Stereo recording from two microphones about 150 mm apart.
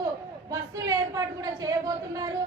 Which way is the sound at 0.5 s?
25° right (ahead or behind).